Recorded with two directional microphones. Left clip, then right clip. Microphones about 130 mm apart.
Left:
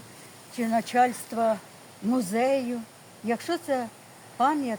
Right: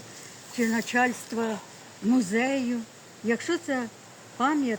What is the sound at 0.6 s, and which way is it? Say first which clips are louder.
Speech: left 2 dB; 25° left (ahead or behind).